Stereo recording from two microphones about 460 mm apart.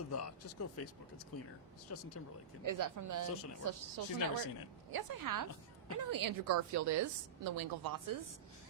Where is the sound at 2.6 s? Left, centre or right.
Right.